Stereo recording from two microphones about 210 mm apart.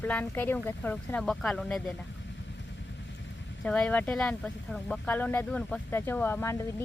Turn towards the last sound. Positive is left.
turn(degrees=10)  # may be behind; listen again after turning